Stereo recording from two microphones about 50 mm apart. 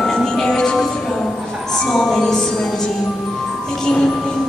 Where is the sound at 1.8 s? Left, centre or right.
Centre.